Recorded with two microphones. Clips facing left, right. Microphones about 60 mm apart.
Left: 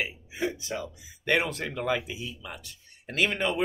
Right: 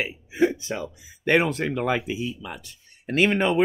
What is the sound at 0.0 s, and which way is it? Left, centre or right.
Speech, right.